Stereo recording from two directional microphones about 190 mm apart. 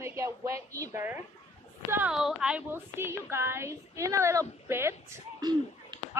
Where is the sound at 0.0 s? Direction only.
15° right (ahead or behind).